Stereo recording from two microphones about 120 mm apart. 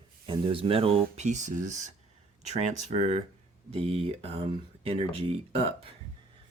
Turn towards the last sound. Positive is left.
turn(degrees=-55)  # may be behind; listen again after turning